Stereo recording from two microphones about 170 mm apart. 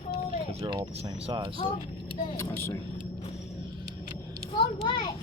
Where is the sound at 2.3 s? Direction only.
15° left (ahead or behind).